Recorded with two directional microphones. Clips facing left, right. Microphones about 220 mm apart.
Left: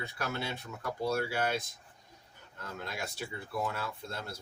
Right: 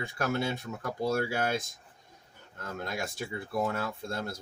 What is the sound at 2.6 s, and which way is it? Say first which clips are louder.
Speech: right 4 dB; 45° right (ahead or behind).